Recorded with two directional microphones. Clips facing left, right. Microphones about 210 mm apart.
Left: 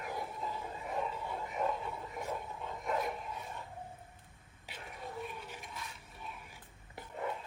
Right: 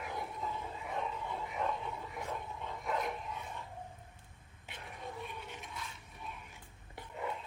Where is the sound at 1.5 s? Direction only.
Centre (ahead or behind).